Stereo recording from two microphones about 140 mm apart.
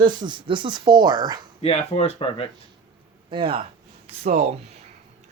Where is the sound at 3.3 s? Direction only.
40° right (ahead or behind).